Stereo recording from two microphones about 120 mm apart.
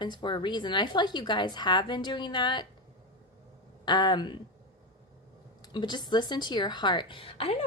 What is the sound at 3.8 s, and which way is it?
Speech, 40° left (ahead or behind).